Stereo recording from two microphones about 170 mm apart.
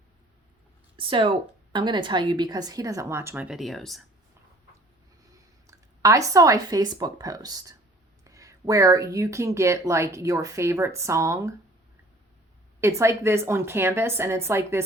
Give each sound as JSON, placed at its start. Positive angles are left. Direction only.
{"t": 0.9, "sound": "speech", "side_deg": -30}
{"t": 5.6, "sound": "speech", "side_deg": -20}
{"t": 12.8, "sound": "speech", "side_deg": -15}